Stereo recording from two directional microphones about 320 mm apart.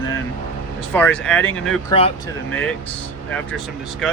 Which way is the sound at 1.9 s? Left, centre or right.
Centre.